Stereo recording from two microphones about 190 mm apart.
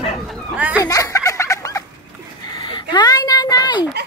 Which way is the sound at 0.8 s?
15° left (ahead or behind).